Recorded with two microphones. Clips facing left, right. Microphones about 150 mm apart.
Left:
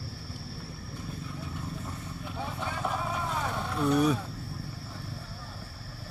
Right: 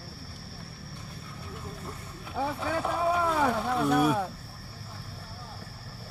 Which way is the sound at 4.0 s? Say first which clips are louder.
Even; 55° right (ahead or behind).